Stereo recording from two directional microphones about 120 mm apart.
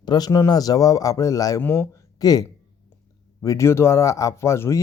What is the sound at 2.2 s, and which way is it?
A man's voice, 30° left (ahead or behind).